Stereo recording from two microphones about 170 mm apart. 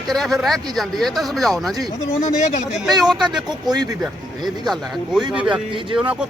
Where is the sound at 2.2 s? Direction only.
45° left (ahead or behind).